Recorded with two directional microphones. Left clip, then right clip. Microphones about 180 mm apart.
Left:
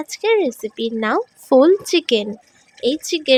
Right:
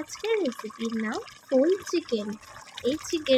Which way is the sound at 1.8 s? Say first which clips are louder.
Left 11 dB; 45° left (ahead or behind).